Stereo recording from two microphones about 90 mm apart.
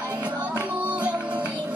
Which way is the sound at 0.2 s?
15° right (ahead or behind).